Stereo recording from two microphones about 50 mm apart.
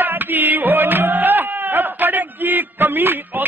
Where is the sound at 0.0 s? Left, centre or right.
Right.